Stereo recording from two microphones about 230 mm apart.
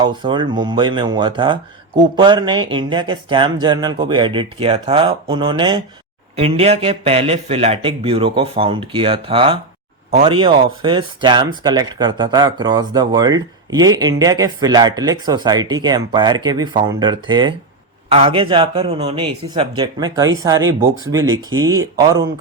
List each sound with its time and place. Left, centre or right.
0.0 s speech: centre